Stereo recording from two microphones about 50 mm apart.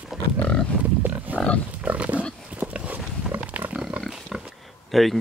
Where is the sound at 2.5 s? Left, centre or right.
Right.